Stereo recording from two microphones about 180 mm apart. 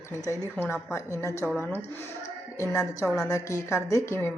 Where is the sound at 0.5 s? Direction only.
15° left (ahead or behind).